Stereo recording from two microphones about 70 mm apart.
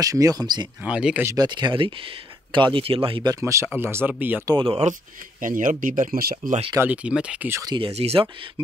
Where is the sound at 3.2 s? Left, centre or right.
Right.